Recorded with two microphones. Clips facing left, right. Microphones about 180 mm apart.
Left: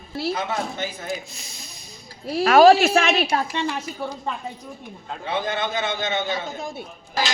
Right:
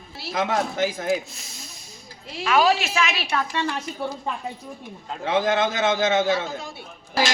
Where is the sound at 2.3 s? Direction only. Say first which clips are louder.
Left 7 dB; 50° left (ahead or behind).